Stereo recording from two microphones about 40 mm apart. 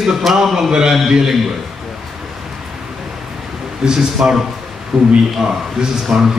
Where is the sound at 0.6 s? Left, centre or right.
Centre.